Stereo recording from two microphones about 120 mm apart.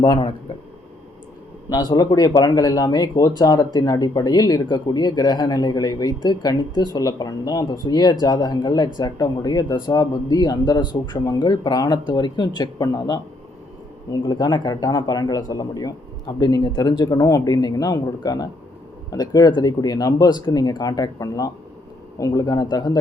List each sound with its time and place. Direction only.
0.0 s speech: 45° left (ahead or behind)
1.7 s speech: 35° left (ahead or behind)